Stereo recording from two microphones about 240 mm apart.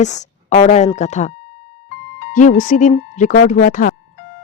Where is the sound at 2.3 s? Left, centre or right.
Left.